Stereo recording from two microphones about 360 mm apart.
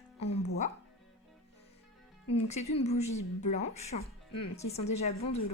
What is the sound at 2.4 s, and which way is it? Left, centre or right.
A woman's voice, centre.